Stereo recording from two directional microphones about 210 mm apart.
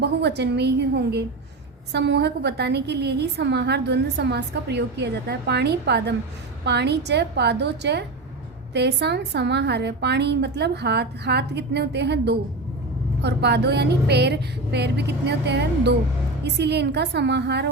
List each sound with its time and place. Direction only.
0.0 s a woman's voice: 50° right (ahead or behind)